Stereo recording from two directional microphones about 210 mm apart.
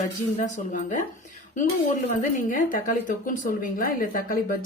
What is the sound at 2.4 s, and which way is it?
A woman's voice, 40° left (ahead or behind).